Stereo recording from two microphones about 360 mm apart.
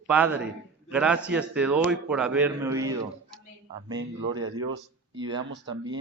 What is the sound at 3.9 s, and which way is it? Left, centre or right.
Speech, right.